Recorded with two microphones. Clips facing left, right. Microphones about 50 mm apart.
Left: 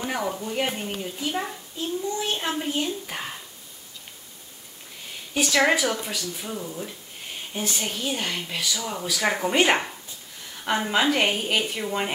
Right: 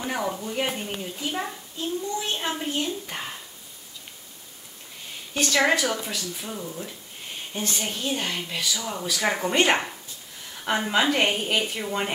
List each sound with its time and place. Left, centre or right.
0.0 s speech: centre
5.3 s speech: centre